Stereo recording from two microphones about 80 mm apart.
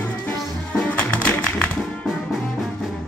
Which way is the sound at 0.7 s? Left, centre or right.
Centre.